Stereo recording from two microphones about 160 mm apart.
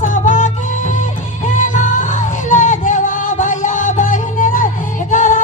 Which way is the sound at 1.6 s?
55° left (ahead or behind).